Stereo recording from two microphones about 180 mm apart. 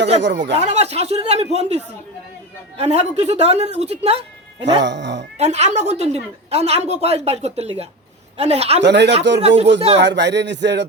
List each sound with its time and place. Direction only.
0.2 s speech: 75° right (ahead or behind)
0.5 s speech: 35° right (ahead or behind)
4.8 s cat: 80° right
5.4 s speech: 40° right (ahead or behind)
8.8 s speech: 70° right (ahead or behind)